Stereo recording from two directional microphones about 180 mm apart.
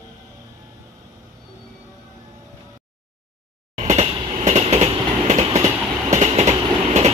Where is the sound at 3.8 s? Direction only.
40° right (ahead or behind).